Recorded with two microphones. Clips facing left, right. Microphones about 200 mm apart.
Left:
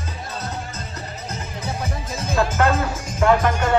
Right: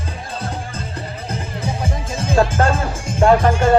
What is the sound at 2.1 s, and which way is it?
Music, 30° right (ahead or behind).